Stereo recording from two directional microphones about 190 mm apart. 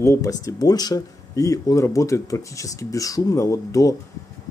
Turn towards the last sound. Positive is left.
turn(degrees=15)  # may be behind; listen again after turning